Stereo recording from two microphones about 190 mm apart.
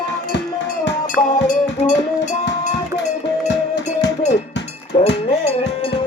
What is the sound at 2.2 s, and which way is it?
Music, 40° left (ahead or behind).